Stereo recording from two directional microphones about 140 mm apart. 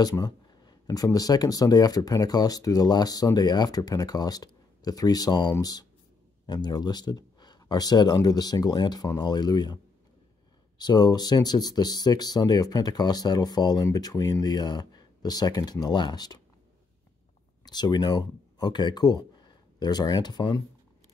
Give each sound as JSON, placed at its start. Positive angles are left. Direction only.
{"t": 0.0, "sound": "speech", "side_deg": 25}
{"t": 10.8, "sound": "speech", "side_deg": 30}
{"t": 17.6, "sound": "speech", "side_deg": 30}